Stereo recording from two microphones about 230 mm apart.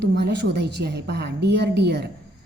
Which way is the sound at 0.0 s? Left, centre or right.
Right.